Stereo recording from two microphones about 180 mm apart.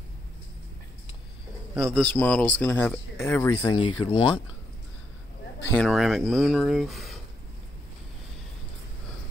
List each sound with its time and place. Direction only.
1.8 s speech: 5° left (ahead or behind)
3.6 s speech: 25° left (ahead or behind)
5.7 s speech: centre (ahead or behind)